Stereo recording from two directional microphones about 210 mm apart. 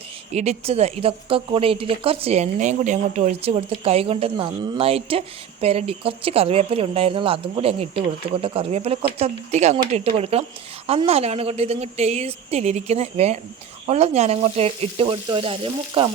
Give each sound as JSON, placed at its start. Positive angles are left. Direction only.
{"t": 0.3, "sound": "a woman's voice", "side_deg": -30}